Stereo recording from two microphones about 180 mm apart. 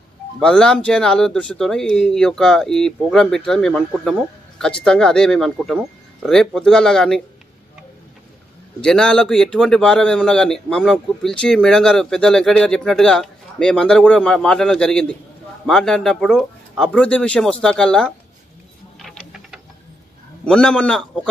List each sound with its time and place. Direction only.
0.4 s speech: 5° left (ahead or behind)
8.8 s speech: 5° left (ahead or behind)
18.9 s a sound: centre (ahead or behind)
20.4 s speech: 5° left (ahead or behind)